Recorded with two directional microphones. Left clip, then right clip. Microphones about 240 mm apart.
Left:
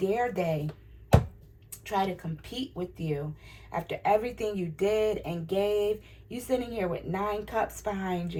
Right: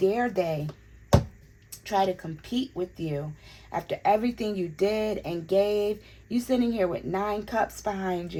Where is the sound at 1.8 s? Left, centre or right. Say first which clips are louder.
Right 4 dB; right.